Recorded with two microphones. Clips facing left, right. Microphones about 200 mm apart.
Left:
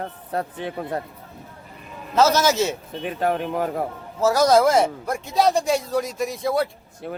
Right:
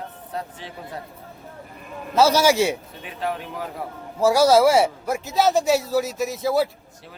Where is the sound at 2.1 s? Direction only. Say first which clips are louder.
Right 1 dB; 10° right (ahead or behind).